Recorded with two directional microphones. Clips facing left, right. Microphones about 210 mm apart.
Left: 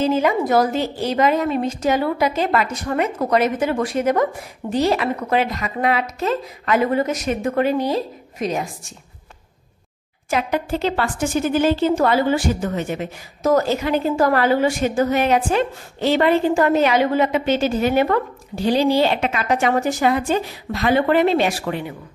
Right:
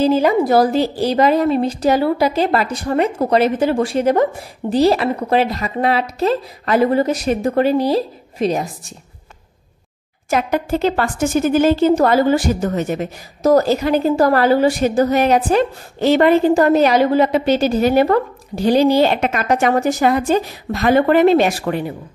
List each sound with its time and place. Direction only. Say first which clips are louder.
0.0 s a woman's voice: right 4 dB; 35° right (ahead or behind)
10.3 s a woman's voice: right 3 dB; 45° right (ahead or behind)